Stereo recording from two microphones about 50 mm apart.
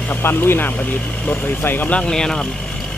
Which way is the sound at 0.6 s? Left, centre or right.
Left.